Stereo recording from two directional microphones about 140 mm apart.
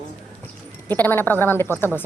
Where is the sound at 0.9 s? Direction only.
15° left (ahead or behind).